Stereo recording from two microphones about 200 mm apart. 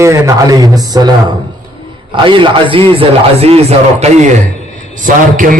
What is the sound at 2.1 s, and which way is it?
Speech, 25° right (ahead or behind).